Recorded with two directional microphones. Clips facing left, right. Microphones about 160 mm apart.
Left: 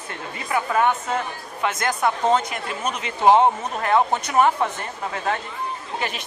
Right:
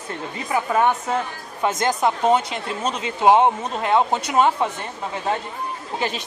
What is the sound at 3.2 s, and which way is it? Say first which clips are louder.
Speech: even; 15° right (ahead or behind).